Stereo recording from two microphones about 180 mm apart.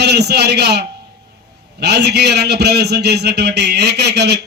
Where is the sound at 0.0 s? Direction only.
65° right (ahead or behind).